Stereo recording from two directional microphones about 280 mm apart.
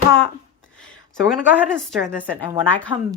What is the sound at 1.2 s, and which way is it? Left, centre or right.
A woman's voice, centre.